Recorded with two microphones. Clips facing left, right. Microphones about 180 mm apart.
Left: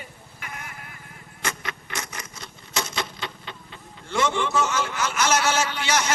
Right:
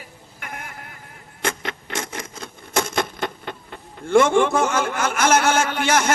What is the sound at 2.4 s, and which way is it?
Speech, 55° right (ahead or behind).